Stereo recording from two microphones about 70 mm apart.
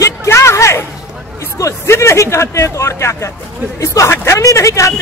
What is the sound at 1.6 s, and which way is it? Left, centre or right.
Speech, left.